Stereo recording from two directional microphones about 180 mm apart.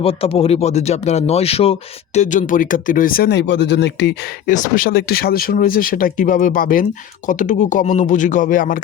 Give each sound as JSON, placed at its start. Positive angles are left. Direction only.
{"t": 0.0, "sound": "speech", "side_deg": 30}
{"t": 4.4, "sound": "speech", "side_deg": 45}